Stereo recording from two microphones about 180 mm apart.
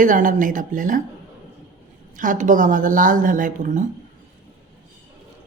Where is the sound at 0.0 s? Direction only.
45° right (ahead or behind).